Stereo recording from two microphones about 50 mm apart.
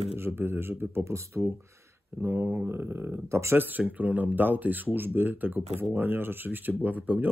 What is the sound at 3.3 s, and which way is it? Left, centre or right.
Speech, right.